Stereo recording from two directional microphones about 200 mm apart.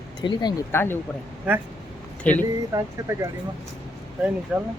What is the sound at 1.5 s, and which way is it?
Speech, 5° right (ahead or behind).